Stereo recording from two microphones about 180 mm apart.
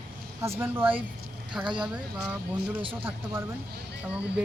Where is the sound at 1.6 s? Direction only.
25° right (ahead or behind).